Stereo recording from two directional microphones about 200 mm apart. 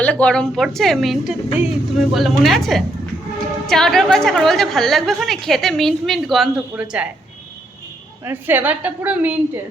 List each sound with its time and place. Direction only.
0.0 s a woman's voice: 5° left (ahead or behind)
8.2 s a woman's voice: 10° right (ahead or behind)